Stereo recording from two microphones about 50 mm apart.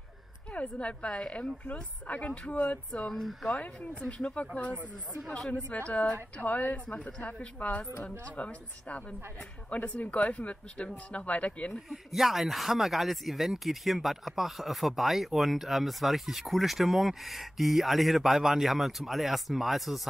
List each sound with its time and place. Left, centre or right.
0.5 s a woman's voice: left
2.9 s speech: centre
3.5 s a woman's voice: left
4.0 s a woman's voice: centre
5.9 s a woman's voice: centre
6.3 s a woman's voice: left
7.1 s a woman's voice: left
11.9 s speech: centre